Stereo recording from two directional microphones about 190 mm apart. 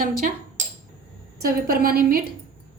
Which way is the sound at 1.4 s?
50° right (ahead or behind).